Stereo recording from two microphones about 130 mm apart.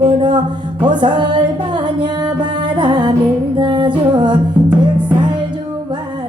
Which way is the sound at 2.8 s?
35° right (ahead or behind).